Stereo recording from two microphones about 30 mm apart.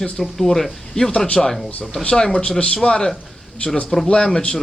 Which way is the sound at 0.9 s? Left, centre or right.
Left.